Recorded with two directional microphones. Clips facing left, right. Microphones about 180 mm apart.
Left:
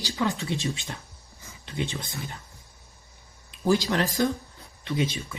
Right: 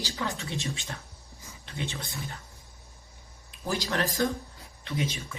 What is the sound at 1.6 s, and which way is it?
Speech, 20° left (ahead or behind).